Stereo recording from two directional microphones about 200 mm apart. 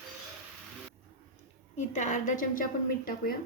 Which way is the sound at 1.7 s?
35° left (ahead or behind).